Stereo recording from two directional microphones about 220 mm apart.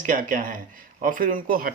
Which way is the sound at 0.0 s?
35° right (ahead or behind).